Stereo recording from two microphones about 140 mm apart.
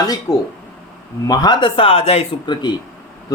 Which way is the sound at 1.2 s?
25° left (ahead or behind).